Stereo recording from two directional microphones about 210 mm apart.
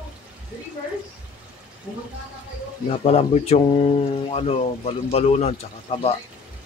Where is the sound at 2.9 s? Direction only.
30° left (ahead or behind).